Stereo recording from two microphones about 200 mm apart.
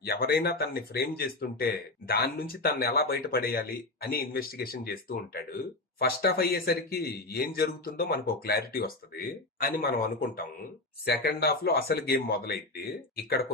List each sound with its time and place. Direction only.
0.0 s speech: 50° left (ahead or behind)